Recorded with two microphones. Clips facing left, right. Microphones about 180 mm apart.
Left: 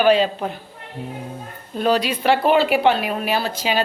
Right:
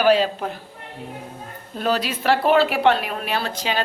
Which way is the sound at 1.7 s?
Centre (ahead or behind).